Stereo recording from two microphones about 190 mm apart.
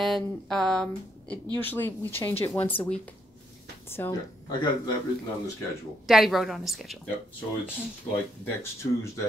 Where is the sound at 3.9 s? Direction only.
15° left (ahead or behind).